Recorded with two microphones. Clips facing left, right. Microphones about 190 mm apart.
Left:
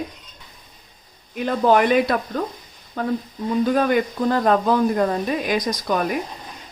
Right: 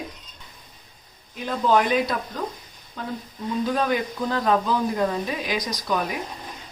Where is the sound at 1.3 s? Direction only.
60° left (ahead or behind).